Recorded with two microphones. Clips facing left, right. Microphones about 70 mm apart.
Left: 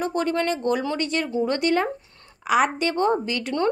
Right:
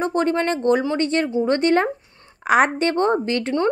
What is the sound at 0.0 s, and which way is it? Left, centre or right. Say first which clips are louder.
A woman's voice: right 3 dB; right.